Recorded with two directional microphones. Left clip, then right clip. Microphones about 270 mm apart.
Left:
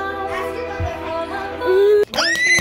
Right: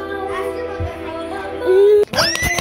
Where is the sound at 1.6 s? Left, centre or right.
Centre.